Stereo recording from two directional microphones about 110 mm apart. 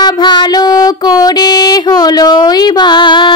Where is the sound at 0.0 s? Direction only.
45° left (ahead or behind).